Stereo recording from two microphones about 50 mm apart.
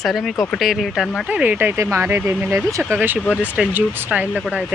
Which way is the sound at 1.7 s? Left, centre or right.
Right.